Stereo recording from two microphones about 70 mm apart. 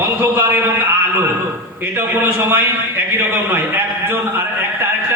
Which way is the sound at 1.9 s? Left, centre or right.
Right.